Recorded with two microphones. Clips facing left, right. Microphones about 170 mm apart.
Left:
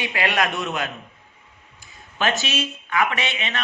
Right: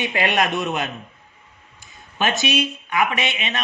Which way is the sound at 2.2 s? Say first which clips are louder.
Right 2 dB; 15° right (ahead or behind).